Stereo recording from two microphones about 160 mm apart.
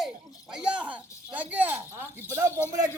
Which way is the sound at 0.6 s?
5° right (ahead or behind).